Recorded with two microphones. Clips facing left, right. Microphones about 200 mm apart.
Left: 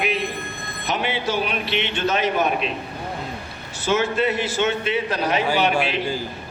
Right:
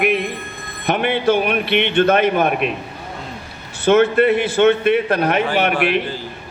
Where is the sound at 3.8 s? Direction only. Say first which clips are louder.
Right 8 dB; 60° right (ahead or behind).